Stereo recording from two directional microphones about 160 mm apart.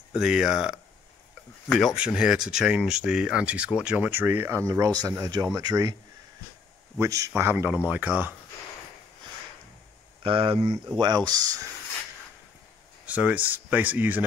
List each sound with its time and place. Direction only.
0.1 s speech: 5° right (ahead or behind)
2.0 s speech: 5° right (ahead or behind); by 5.9 s 25° right (ahead or behind)
7.0 s speech: 20° right (ahead or behind)
10.2 s speech: 35° right (ahead or behind)
13.0 s speech: 10° right (ahead or behind)